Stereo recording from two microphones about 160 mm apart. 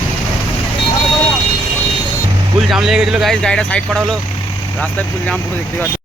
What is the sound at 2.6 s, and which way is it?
Speech, centre (ahead or behind).